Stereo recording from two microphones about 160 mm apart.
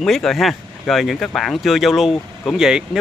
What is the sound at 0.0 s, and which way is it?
Speech, 5° left (ahead or behind).